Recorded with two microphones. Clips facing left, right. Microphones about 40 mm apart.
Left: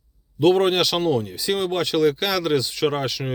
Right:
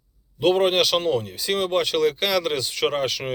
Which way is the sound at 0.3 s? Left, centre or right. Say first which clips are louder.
Left 2 dB; centre.